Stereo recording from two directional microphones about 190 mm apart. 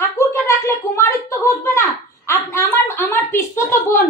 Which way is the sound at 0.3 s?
15° left (ahead or behind).